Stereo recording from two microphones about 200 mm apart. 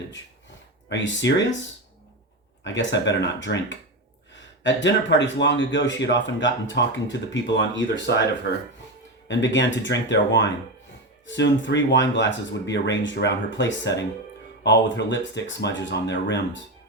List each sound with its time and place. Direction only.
0.9 s speech: 65° left (ahead or behind)
2.6 s speech: 65° left (ahead or behind)